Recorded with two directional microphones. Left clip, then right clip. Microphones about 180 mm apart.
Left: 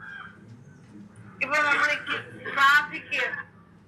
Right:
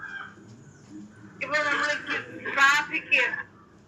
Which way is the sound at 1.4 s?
25° left (ahead or behind).